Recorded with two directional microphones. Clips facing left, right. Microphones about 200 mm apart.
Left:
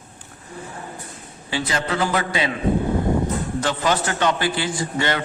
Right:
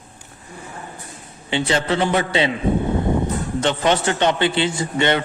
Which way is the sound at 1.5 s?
25° right (ahead or behind).